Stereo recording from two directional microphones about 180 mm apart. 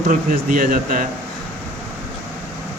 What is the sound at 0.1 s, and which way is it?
Speech, 50° right (ahead or behind).